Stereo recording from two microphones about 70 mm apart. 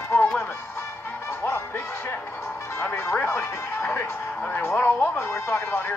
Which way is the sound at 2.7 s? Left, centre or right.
Left.